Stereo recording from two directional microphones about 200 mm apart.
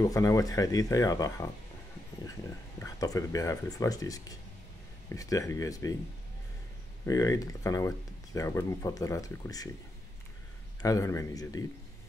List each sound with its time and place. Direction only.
0.0 s speech: 15° left (ahead or behind)
2.8 s speech: 15° left (ahead or behind)
7.1 s speech: 15° left (ahead or behind)
10.8 s speech: 15° left (ahead or behind)